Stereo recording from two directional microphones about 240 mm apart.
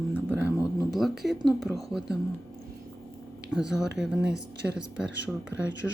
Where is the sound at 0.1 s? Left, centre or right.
Centre.